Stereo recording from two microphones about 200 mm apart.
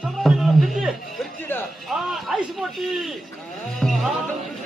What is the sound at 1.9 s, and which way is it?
Speech, centre (ahead or behind).